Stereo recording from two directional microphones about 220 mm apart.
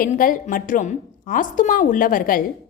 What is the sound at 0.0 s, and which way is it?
A woman's voice, 40° left (ahead or behind).